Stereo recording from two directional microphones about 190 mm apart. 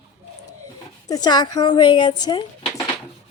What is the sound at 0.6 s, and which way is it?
Speech, 20° left (ahead or behind).